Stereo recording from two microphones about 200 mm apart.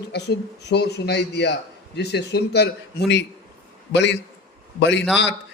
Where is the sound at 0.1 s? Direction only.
55° left (ahead or behind).